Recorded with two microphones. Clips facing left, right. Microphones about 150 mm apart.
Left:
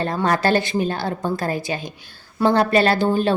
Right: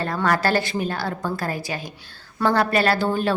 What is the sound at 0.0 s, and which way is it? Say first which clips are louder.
A woman's voice: left 2 dB; 20° left (ahead or behind).